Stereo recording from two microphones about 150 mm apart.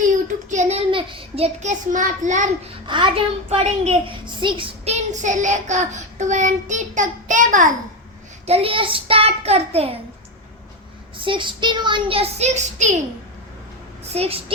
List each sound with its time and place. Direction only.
0.5 s child singing: 50° right (ahead or behind)
0.9 s a child's voice: 35° right (ahead or behind)
1.5 s a child's voice: 55° right (ahead or behind)
2.8 s a child's voice: 30° right (ahead or behind)
5.2 s child singing: 55° right (ahead or behind)
8.4 s a child's voice: 40° right (ahead or behind)
11.2 s a child's voice: 35° right (ahead or behind); by 13.0 s 50° right (ahead or behind)
14.1 s a child's voice: 40° right (ahead or behind)